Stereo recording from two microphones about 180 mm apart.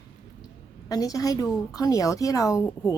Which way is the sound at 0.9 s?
20° left (ahead or behind).